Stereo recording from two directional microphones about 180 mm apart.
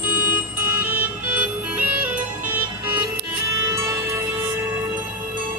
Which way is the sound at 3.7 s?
15° right (ahead or behind).